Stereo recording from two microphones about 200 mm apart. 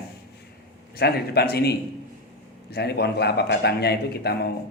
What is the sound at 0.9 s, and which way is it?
A man's voice, 50° left (ahead or behind).